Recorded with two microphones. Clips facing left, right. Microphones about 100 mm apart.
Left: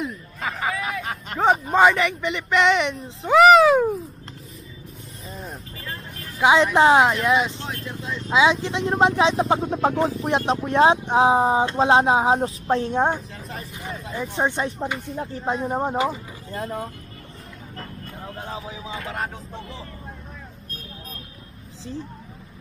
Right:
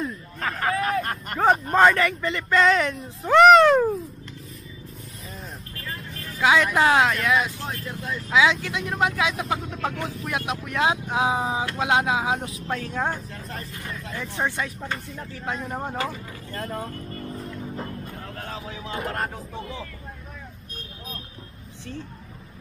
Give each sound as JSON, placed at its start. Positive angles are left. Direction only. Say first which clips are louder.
{"t": 0.0, "sound": "hubbub", "louder": "even", "side_deg": 5}
{"t": 1.5, "sound": "speech", "louder": "left 1 dB", "side_deg": 5}
{"t": 2.2, "sound": "speech", "louder": "left 1 dB", "side_deg": 20}
{"t": 2.9, "sound": "speech", "louder": "left 1 dB", "side_deg": 0}
{"t": 5.4, "sound": "vehicle", "louder": "left 3 dB", "side_deg": 0}
{"t": 6.4, "sound": "speech", "louder": "left 3 dB", "side_deg": 20}
{"t": 7.6, "sound": "speech", "louder": "even", "side_deg": 0}
{"t": 8.3, "sound": "speech", "louder": "left 2 dB", "side_deg": 20}
{"t": 16.5, "sound": "speech", "louder": "left 2 dB", "side_deg": 5}
{"t": 17.7, "sound": "music", "louder": "right 4 dB", "side_deg": -10}
{"t": 18.2, "sound": "speech", "louder": "left 2 dB", "side_deg": 15}
{"t": 19.0, "sound": "speech", "louder": "right 1 dB", "side_deg": 0}